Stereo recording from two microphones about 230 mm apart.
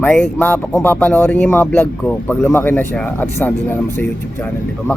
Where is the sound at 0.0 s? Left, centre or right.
Centre.